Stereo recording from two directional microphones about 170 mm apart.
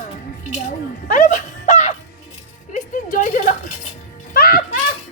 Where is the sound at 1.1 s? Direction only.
50° left (ahead or behind).